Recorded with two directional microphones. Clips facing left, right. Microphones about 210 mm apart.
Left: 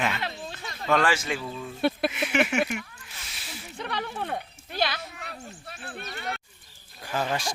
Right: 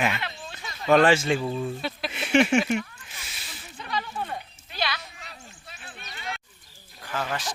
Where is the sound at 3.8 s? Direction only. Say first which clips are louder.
Even; 65° left (ahead or behind).